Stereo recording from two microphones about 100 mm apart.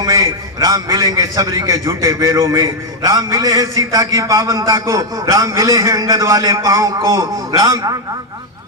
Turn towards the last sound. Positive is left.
turn(degrees=-35)  # may be behind; listen again after turning